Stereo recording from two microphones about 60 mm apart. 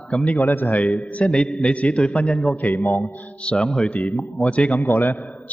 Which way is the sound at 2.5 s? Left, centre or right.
Left.